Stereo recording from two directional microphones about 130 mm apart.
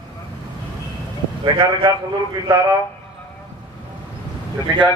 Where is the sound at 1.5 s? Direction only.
40° right (ahead or behind).